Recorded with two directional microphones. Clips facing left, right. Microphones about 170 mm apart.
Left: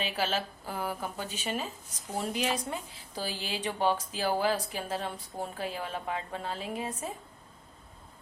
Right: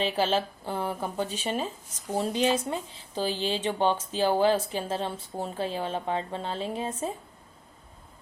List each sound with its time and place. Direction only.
0.0 s speech: 30° right (ahead or behind)